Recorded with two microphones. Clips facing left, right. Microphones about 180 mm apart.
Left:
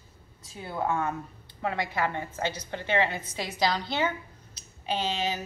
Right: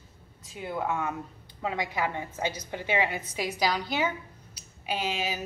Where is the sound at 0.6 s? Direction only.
10° right (ahead or behind).